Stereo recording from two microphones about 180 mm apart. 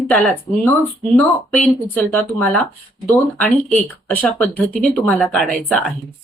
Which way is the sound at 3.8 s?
10° left (ahead or behind).